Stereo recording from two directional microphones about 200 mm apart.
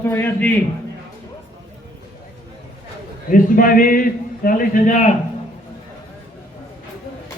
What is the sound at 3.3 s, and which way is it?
A man's voice, 45° left (ahead or behind).